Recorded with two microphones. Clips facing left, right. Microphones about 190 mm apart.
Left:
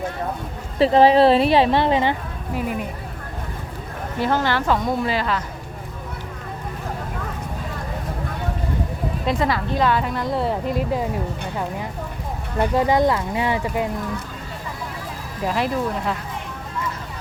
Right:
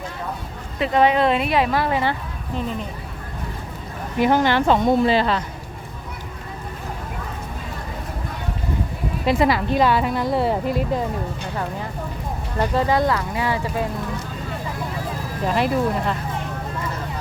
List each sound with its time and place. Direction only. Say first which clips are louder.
0.8 s a woman's voice: left 4 dB; 30° left (ahead or behind)
2.6 s speech: left 1 dB; 10° left (ahead or behind)
4.2 s speech: right 4 dB; 15° right (ahead or behind)
9.2 s a woman's voice: right 4 dB; 10° right (ahead or behind)
12.5 s speech: left 2 dB; 15° left (ahead or behind)
15.4 s a woman's voice: right 2 dB; centre (ahead or behind)